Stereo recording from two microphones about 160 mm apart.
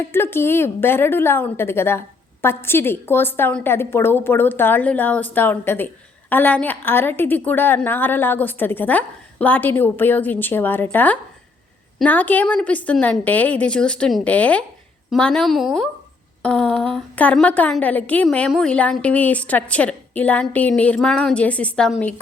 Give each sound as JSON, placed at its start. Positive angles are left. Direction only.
{"t": 0.0, "sound": "a woman's voice", "side_deg": 15}